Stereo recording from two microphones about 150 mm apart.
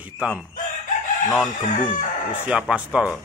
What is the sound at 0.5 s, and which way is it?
Chicken, 60° left (ahead or behind).